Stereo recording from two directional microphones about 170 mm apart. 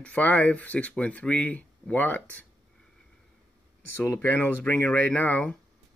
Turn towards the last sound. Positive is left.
turn(degrees=10)  # may be behind; listen again after turning